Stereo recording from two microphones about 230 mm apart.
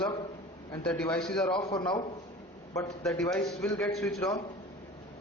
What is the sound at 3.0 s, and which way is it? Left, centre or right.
A man's voice, centre.